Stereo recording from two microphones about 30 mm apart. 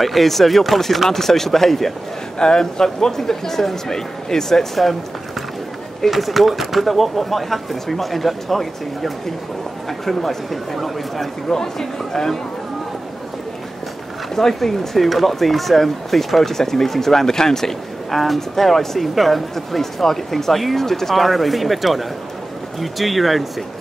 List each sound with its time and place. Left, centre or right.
0.0 s speech: centre
2.3 s speech: left
6.0 s speech: centre
11.4 s speech: centre
14.3 s speech: centre